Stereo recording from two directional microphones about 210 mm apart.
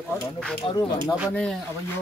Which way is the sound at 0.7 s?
25° left (ahead or behind).